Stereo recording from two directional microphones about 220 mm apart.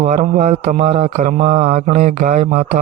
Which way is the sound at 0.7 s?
30° right (ahead or behind).